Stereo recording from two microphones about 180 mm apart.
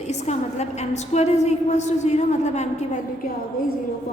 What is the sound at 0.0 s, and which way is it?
A woman's voice, 40° left (ahead or behind).